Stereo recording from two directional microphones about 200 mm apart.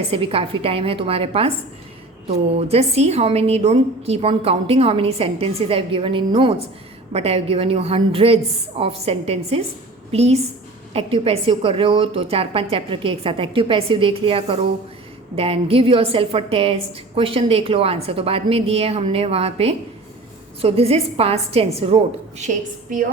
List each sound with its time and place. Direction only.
0.1 s a woman's voice: 30° right (ahead or behind)
2.6 s a woman's voice: 30° right (ahead or behind)